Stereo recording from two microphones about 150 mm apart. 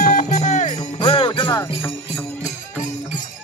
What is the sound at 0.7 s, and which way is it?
Jingle bell, 30° left (ahead or behind).